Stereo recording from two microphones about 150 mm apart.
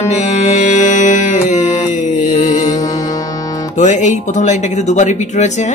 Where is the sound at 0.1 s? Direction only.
50° left (ahead or behind).